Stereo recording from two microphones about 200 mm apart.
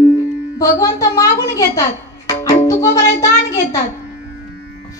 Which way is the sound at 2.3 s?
15° left (ahead or behind).